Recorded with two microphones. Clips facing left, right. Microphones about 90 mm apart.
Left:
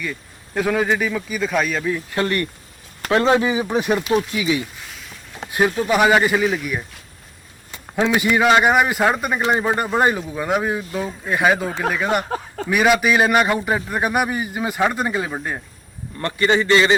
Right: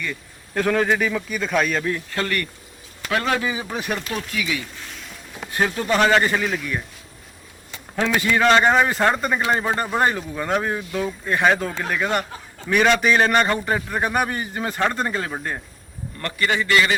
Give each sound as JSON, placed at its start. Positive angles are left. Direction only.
{"t": 0.0, "sound": "a man's voice", "side_deg": 5}
{"t": 2.0, "sound": "a man's voice", "side_deg": 20}
{"t": 7.9, "sound": "a man's voice", "side_deg": 15}
{"t": 16.2, "sound": "speech", "side_deg": 25}